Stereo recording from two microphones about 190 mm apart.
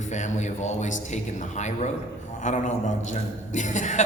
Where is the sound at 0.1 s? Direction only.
40° left (ahead or behind).